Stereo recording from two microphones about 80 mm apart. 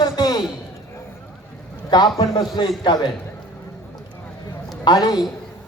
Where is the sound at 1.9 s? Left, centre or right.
Left.